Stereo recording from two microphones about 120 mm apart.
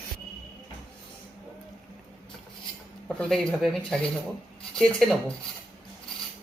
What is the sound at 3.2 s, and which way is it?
Speech, 5° left (ahead or behind).